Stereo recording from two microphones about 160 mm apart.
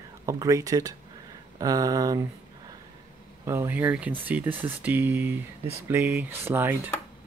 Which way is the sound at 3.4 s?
15° right (ahead or behind).